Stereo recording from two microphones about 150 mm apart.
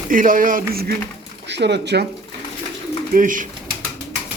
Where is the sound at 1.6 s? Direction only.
90° right.